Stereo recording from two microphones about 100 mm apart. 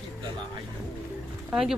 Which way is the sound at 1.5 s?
5° right (ahead or behind).